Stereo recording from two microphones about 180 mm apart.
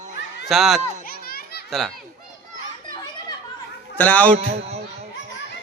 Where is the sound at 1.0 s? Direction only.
55° left (ahead or behind).